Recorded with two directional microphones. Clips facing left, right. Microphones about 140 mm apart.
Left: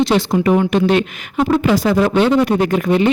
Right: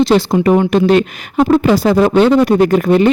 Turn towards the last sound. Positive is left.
turn(degrees=-40)  # may be behind; listen again after turning